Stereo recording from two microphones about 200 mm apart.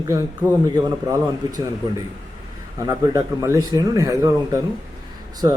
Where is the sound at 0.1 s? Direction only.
15° right (ahead or behind).